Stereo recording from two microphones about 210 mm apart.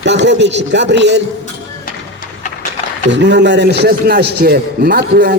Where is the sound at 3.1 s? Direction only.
55° right (ahead or behind).